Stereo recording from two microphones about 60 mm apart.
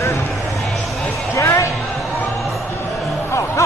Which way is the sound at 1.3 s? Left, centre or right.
Left.